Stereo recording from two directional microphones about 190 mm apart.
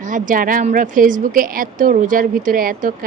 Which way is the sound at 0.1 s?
45° right (ahead or behind).